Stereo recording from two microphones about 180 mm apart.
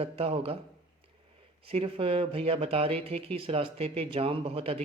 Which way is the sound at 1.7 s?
30° right (ahead or behind).